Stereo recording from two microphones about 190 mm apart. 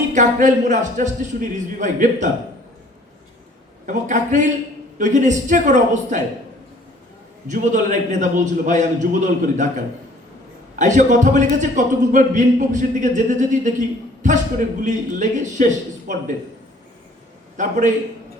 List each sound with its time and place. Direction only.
0.1 s a man's voice: 40° right (ahead or behind)
3.8 s a man's voice: 40° right (ahead or behind)
7.4 s a man's voice: 40° right (ahead or behind)
17.6 s a man's voice: 40° right (ahead or behind)